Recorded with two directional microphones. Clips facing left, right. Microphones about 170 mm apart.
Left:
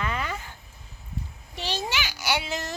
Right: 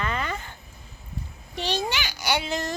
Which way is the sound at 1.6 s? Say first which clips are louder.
Right 3 dB; 5° left (ahead or behind).